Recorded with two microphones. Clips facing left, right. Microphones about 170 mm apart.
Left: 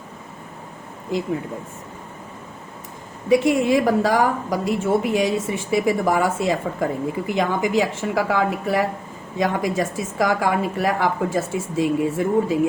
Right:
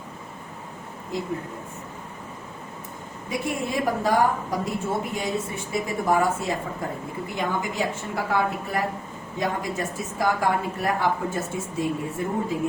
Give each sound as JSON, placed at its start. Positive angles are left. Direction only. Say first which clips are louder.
{"t": 3.2, "sound": "a woman's voice", "louder": "left 11 dB", "side_deg": 90}